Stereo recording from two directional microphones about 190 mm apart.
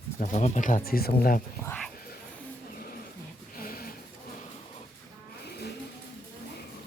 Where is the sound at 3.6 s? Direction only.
50° left (ahead or behind).